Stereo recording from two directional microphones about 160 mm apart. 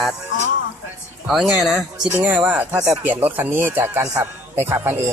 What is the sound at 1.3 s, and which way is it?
Speech, centre (ahead or behind).